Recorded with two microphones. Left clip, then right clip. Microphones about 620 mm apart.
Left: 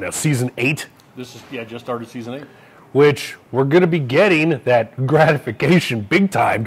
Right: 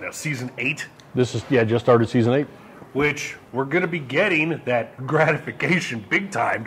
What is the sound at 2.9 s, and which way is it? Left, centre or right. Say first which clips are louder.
Speech: left 8 dB; left.